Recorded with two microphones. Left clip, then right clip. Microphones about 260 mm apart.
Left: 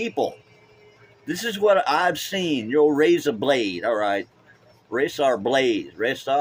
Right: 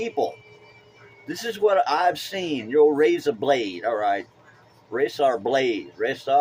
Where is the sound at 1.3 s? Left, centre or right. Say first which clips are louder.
Left 2 dB; left.